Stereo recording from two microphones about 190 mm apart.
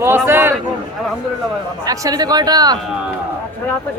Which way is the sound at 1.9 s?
20° right (ahead or behind).